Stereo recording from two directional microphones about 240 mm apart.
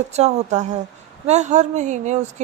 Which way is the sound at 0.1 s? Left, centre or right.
Right.